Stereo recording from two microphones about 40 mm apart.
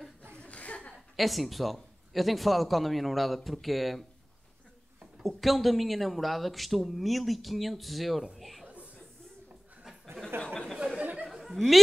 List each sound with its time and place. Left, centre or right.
0.3 s chuckle: left
1.1 s speech: centre
5.2 s speech: centre
8.4 s a sound: centre
8.6 s chuckle: right
10.3 s a sound: right
11.0 s chatter: right
11.5 s a woman's voice: centre